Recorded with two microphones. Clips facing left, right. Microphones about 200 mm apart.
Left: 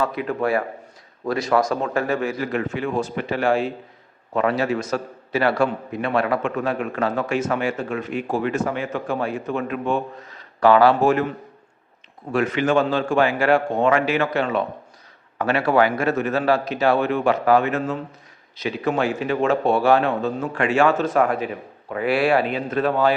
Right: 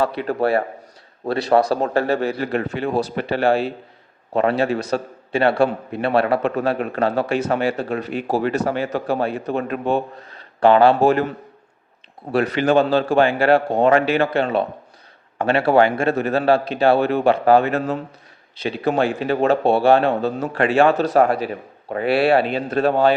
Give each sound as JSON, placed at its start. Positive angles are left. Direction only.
{"t": 0.0, "sound": "a man's voice", "side_deg": -35}
{"t": 12.3, "sound": "a man's voice", "side_deg": -35}